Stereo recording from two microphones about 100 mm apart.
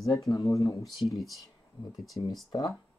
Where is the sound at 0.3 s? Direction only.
30° left (ahead or behind).